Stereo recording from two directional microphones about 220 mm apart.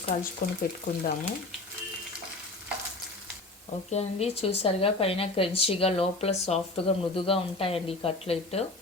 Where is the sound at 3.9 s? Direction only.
30° left (ahead or behind).